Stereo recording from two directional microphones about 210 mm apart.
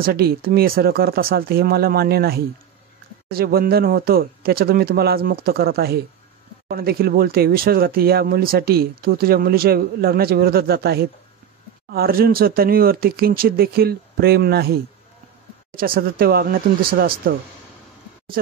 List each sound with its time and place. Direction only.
0.0 s speech: 45° right (ahead or behind)
15.8 s speech: 45° right (ahead or behind)